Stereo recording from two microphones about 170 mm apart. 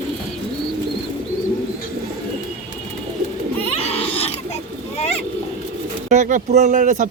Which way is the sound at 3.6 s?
35° left (ahead or behind).